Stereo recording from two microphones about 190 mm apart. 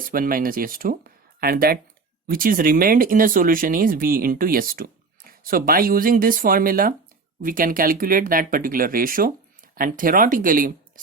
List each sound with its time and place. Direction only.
0.0 s speech: 50° right (ahead or behind)